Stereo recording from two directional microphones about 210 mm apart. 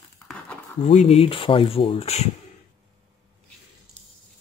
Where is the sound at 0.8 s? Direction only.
30° left (ahead or behind).